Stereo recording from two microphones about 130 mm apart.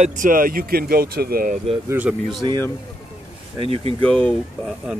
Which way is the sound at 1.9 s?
15° right (ahead or behind).